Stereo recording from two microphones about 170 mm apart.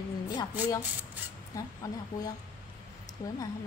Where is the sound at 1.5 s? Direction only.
20° left (ahead or behind).